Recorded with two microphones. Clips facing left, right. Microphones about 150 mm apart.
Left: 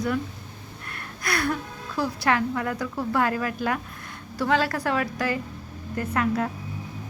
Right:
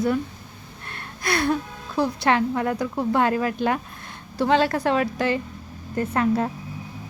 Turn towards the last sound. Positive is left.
turn(degrees=-30)  # may be behind; listen again after turning